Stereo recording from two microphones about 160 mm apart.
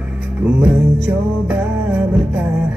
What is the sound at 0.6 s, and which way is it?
Music, 10° right (ahead or behind).